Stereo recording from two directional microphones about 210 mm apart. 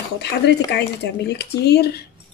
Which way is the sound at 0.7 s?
55° left (ahead or behind).